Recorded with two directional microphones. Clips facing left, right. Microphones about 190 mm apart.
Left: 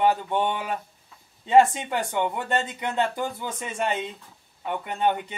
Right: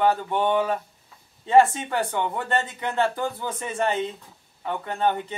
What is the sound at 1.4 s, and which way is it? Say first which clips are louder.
Speech: even; 15° left (ahead or behind).